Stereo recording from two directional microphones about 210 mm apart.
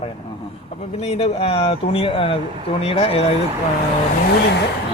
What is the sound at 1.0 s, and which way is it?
Speech, 30° left (ahead or behind).